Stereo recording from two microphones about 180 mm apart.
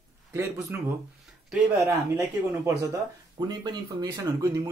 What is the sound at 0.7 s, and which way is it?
Speech, 10° right (ahead or behind).